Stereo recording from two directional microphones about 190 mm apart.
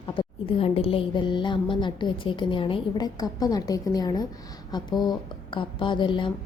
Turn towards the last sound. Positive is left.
turn(degrees=25)  # may be behind; listen again after turning